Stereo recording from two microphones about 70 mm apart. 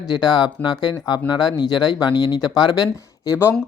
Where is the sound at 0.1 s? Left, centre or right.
Left.